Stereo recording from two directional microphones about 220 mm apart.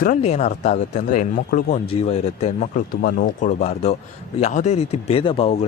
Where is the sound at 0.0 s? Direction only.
35° left (ahead or behind).